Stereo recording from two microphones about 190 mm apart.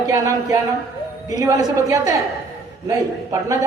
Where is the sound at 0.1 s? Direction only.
15° right (ahead or behind).